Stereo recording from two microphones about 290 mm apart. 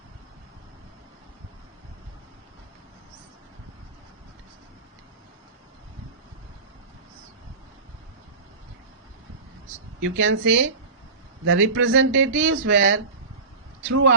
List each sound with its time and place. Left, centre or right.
10.0 s speech: right